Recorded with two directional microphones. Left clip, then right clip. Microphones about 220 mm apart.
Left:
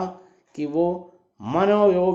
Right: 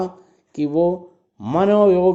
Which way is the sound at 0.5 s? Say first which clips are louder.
Right 4 dB; 40° right (ahead or behind).